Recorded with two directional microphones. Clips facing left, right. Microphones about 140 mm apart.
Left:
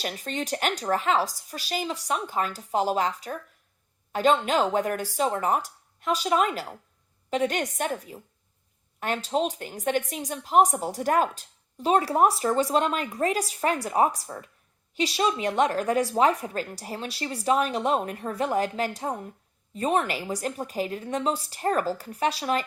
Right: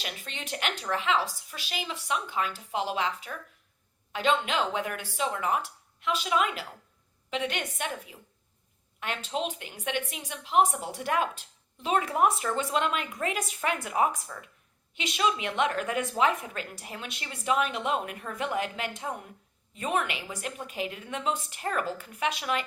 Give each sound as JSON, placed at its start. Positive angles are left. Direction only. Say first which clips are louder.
{"t": 0.0, "sound": "a woman's voice", "louder": "left 8 dB", "side_deg": 40}